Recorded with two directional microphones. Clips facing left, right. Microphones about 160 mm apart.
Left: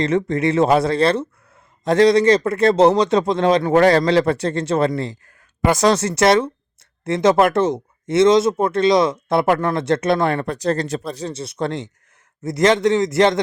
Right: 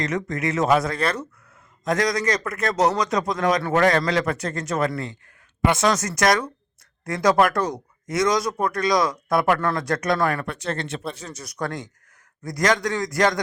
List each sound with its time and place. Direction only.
0.0 s speech: 30° left (ahead or behind)